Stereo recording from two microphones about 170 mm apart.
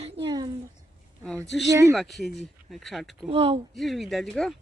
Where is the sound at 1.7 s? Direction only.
15° right (ahead or behind).